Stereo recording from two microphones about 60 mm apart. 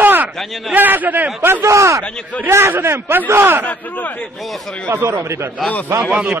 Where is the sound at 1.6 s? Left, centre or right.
Right.